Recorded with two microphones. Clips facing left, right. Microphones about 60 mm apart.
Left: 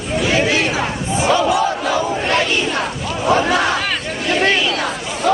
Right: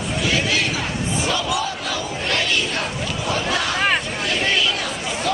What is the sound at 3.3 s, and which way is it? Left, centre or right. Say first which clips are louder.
Crowd: left 8 dB; left.